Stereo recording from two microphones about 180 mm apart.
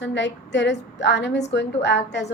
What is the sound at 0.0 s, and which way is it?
A woman's voice, 80° left.